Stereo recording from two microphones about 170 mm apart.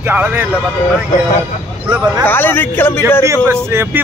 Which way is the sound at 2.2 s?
10° left (ahead or behind).